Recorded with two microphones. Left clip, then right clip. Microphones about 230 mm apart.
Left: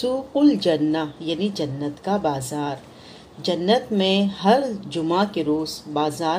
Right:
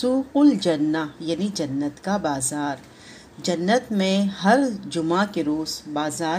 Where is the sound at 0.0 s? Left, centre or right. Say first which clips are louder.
Even; right.